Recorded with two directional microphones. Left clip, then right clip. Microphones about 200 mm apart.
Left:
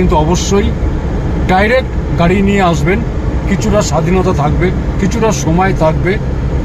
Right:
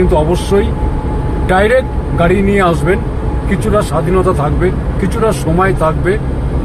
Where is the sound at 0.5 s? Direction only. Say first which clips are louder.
Right 1 dB; 10° left (ahead or behind).